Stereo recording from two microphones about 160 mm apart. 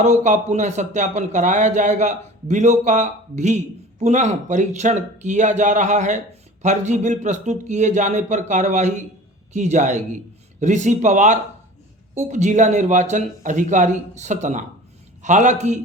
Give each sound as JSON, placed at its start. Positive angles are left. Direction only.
{"t": 0.0, "sound": "speech", "side_deg": -45}